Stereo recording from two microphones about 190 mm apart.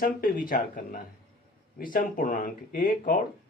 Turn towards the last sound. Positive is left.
turn(degrees=45)  # may be behind; listen again after turning